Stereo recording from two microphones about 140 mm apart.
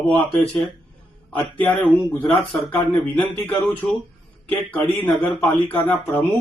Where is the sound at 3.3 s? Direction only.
10° left (ahead or behind).